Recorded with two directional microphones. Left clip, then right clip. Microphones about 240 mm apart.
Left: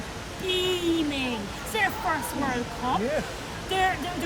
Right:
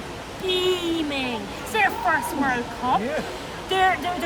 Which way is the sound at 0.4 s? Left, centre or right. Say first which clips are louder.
Right 3 dB; centre.